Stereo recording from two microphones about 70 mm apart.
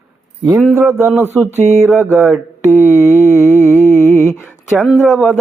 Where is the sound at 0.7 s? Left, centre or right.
Right.